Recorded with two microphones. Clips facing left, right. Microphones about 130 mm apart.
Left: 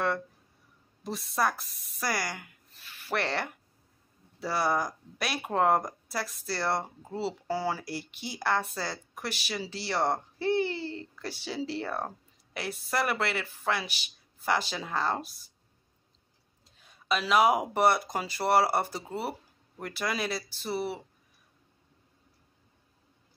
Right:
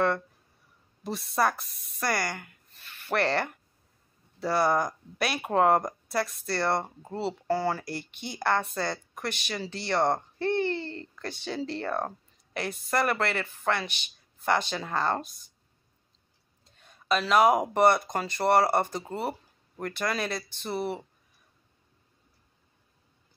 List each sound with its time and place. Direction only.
1.0 s speech: centre (ahead or behind)
16.6 s speech: centre (ahead or behind)